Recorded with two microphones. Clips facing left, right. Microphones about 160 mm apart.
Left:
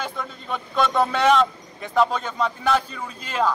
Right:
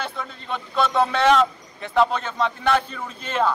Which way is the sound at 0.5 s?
Centre (ahead or behind).